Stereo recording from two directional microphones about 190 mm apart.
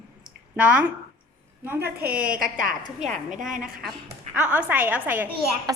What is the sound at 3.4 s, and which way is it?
Speech, 45° right (ahead or behind).